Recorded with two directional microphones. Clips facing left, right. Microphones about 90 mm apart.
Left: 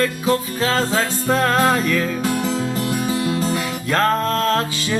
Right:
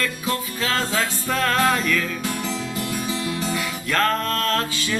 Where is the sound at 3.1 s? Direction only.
40° left (ahead or behind).